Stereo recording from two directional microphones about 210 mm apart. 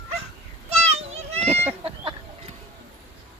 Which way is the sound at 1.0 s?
30° right (ahead or behind).